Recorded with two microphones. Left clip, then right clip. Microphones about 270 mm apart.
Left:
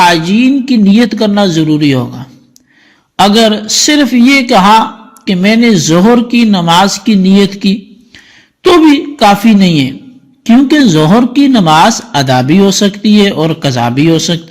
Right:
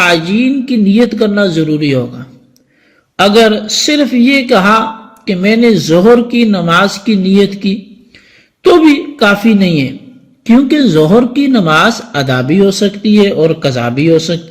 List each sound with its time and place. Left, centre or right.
0.0 s speech: left
3.3 s speech: left
8.8 s speech: left